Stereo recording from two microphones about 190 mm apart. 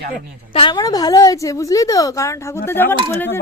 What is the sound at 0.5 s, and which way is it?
A woman's voice, 25° left (ahead or behind).